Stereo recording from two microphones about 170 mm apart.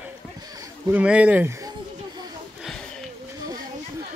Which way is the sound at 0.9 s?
10° right (ahead or behind).